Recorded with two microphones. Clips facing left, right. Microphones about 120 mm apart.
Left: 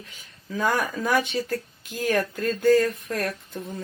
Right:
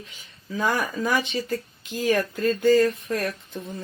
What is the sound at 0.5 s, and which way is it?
Speech, 5° right (ahead or behind).